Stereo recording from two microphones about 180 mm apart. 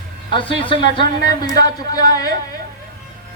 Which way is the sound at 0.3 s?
25° left (ahead or behind).